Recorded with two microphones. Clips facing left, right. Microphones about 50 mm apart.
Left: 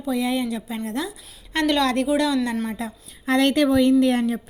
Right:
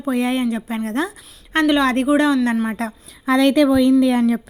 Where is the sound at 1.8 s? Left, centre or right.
Right.